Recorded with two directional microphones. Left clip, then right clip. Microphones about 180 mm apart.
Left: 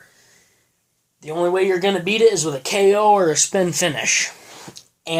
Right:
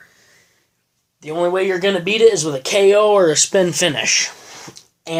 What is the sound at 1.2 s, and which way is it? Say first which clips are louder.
Speech: right 1 dB; 20° right (ahead or behind).